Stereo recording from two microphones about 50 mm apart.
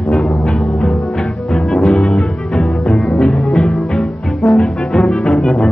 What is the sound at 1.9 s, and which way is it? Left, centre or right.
Music, centre.